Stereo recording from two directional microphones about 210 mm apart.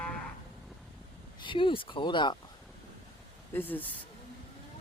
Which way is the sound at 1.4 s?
25° left (ahead or behind).